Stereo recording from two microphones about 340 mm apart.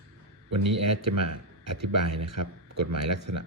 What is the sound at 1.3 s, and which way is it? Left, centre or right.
Speech, right.